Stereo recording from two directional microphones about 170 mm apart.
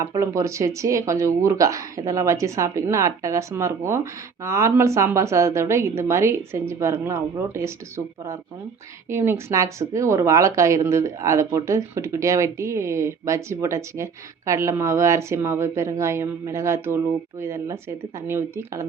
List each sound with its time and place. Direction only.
0.0 s speech: 20° right (ahead or behind)